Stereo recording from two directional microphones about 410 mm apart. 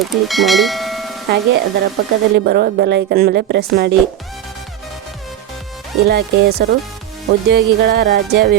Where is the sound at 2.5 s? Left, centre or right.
Right.